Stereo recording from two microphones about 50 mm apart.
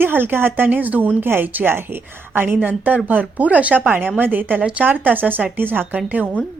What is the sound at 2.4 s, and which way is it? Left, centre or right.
A woman's voice, right.